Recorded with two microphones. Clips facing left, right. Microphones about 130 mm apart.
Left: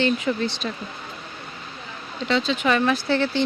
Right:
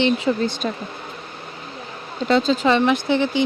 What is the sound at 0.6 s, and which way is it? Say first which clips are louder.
Speech: right 5 dB; 35° right (ahead or behind).